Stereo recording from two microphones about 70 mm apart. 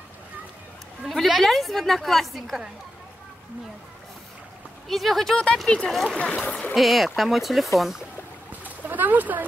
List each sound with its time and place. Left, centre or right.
1.0 s a woman's voice: centre
4.8 s a woman's voice: centre
6.1 s speech: centre
6.7 s a woman's voice: centre
8.5 s a sound: right